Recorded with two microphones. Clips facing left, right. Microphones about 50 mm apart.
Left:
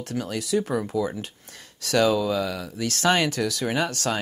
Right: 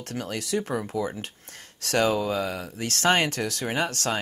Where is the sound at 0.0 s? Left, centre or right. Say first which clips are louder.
Left 3 dB; right.